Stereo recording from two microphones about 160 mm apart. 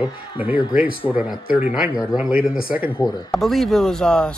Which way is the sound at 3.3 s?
Centre (ahead or behind).